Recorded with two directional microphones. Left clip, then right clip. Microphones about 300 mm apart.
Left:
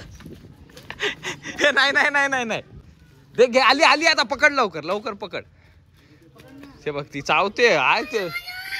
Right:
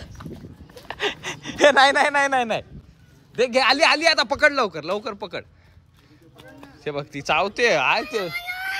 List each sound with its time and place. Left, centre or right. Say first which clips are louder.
0.8 s gasp: even; centre
3.3 s a man's voice: left 2 dB; centre